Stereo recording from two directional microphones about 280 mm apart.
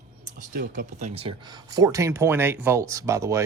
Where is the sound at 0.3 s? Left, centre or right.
Right.